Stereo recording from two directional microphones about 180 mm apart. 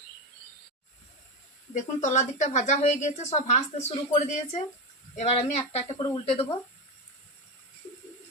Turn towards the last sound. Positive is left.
turn(degrees=35)  # may be behind; listen again after turning